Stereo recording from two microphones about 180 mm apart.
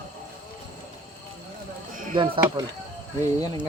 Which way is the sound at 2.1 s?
30° right (ahead or behind).